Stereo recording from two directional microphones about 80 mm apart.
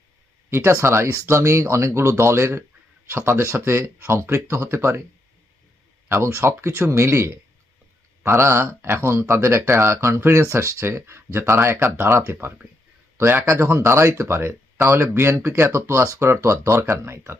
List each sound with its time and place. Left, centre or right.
0.5 s speech: right
6.1 s speech: right